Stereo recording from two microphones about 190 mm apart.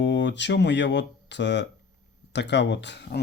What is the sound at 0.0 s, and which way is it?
Speech, 70° left (ahead or behind).